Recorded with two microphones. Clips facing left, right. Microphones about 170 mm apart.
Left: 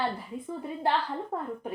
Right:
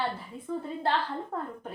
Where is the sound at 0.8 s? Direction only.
15° left (ahead or behind).